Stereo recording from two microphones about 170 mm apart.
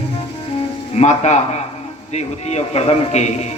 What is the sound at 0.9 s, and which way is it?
A man's voice, 40° left (ahead or behind).